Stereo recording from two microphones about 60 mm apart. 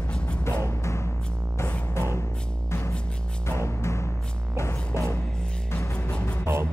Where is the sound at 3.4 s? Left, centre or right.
Left.